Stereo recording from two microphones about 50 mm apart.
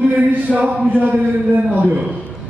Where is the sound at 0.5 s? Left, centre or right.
Right.